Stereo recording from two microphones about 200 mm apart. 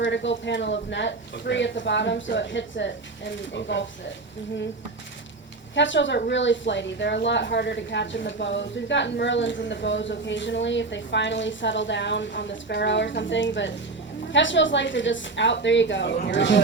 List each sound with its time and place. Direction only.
0.0 s a woman's voice: 65° left (ahead or behind)
5.7 s a woman's voice: 65° left (ahead or behind)